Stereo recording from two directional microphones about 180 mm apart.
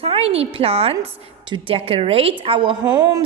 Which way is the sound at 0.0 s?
35° right (ahead or behind).